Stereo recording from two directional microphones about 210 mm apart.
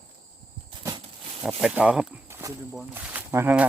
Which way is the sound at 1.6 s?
5° right (ahead or behind).